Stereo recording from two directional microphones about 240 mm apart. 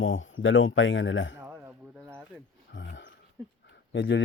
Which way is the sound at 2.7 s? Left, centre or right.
Left.